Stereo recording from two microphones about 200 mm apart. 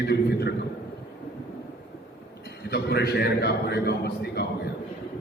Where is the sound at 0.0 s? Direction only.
55° left (ahead or behind).